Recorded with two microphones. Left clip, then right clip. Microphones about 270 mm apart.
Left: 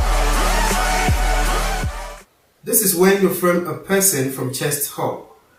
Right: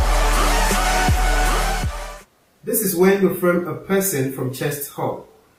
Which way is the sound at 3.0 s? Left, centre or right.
Centre.